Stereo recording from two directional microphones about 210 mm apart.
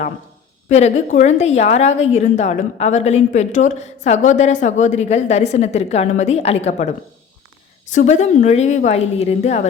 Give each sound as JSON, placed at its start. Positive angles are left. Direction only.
{"t": 0.7, "sound": "speech", "side_deg": 30}